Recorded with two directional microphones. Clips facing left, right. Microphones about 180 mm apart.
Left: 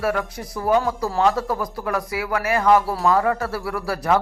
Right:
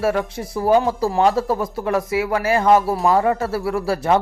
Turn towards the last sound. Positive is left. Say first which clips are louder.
# right 3 dB
turn(degrees=-25)  # may be behind; listen again after turning